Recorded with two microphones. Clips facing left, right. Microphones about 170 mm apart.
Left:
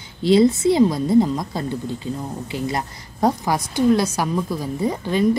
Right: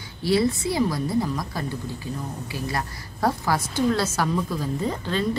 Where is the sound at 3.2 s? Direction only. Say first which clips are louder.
Left 4 dB; 15° left (ahead or behind).